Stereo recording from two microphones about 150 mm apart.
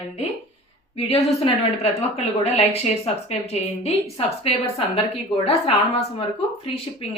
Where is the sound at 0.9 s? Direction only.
40° left (ahead or behind).